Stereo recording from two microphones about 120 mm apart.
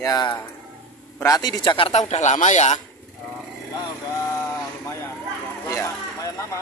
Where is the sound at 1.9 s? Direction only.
75° left (ahead or behind).